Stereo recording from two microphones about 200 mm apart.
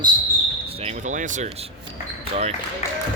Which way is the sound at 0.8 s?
40° right (ahead or behind).